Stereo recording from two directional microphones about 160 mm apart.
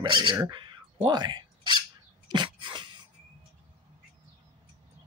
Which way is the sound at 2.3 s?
30° right (ahead or behind).